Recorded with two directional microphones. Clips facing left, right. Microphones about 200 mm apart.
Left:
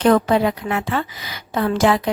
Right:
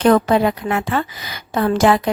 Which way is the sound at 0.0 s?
50° right (ahead or behind).